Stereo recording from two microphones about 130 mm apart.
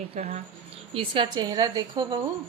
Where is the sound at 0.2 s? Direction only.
55° right (ahead or behind).